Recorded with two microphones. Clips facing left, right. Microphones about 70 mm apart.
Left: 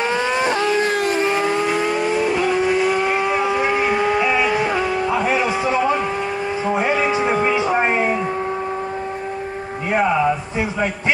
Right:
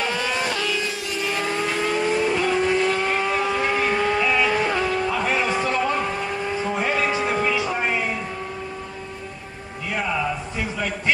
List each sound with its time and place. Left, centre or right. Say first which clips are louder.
0.0 s vehicle: left 5 dB; left
1.4 s vehicle: left 5 dB; centre
6.6 s music: left 5 dB; centre
9.8 s a sound: left 8 dB; left